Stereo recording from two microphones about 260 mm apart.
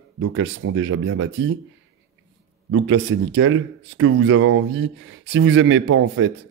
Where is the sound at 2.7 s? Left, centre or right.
Right.